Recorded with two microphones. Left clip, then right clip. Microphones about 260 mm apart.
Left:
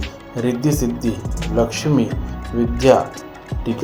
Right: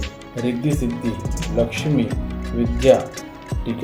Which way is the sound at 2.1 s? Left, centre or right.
Centre.